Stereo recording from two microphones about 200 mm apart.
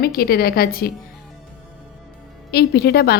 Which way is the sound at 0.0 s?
50° left (ahead or behind).